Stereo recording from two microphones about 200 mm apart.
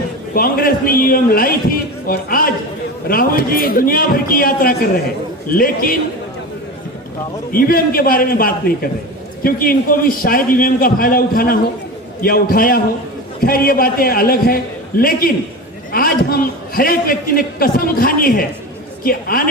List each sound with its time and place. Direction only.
0.3 s a man's voice: 45° left (ahead or behind)
7.5 s a man's voice: 45° left (ahead or behind)